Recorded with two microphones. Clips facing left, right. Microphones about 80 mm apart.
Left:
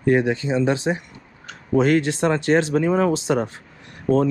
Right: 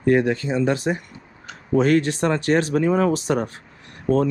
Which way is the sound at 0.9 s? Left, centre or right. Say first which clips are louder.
Left 1 dB; left.